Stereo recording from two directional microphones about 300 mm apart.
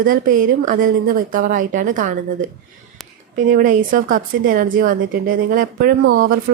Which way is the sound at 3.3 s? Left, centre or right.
Right.